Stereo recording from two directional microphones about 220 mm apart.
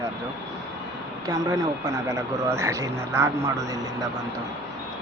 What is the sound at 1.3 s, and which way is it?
Speech, 15° right (ahead or behind).